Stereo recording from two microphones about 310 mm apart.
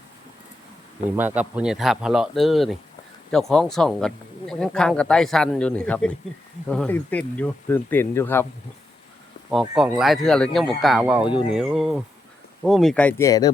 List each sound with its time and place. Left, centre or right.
1.1 s speech: centre
9.5 s speech: centre
11.3 s speech: centre
11.5 s speech: centre